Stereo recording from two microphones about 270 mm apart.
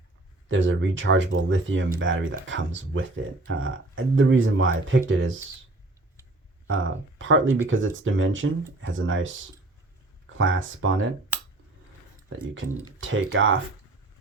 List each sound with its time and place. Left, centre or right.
0.4 s speech: right
6.7 s speech: right
13.0 s speech: right